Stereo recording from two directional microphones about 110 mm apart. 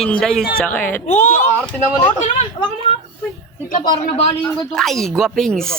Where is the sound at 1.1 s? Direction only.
90° left.